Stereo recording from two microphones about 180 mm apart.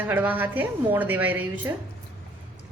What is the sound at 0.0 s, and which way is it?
A woman's voice, 10° right (ahead or behind).